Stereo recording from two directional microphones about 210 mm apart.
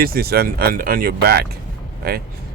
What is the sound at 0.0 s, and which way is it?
Speech, 45° right (ahead or behind).